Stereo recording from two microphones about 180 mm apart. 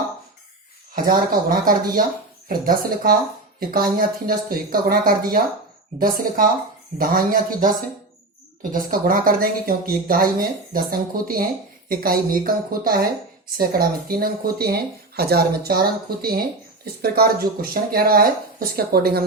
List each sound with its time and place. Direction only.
1.0 s speech: 50° right (ahead or behind)
8.7 s speech: 55° right (ahead or behind)